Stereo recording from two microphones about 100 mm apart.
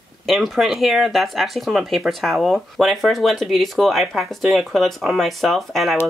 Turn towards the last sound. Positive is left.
turn(degrees=0)  # may be behind; listen again after turning